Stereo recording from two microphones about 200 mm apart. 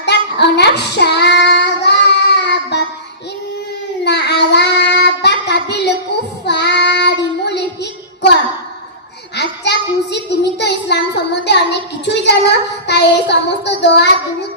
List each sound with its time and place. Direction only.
0.0 s child singing: 60° left (ahead or behind)
4.0 s child singing: 60° left (ahead or behind)
9.3 s a sound: 60° left (ahead or behind)
11.4 s child singing: 60° left (ahead or behind)